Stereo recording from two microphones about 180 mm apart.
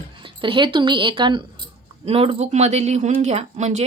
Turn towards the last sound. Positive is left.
turn(degrees=-40)  # may be behind; listen again after turning